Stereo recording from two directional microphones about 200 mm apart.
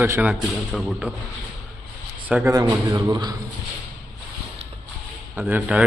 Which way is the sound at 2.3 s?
10° right (ahead or behind).